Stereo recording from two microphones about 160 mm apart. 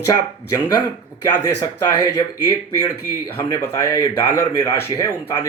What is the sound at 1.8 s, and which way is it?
A man's voice, 20° left (ahead or behind).